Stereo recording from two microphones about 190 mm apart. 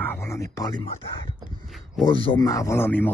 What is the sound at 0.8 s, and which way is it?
Speech, 30° left (ahead or behind).